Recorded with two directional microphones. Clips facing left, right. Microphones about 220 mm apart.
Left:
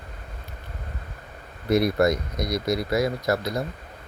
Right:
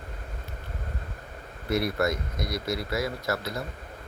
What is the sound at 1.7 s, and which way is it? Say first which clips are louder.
Speech: left 6 dB; 15° left (ahead or behind).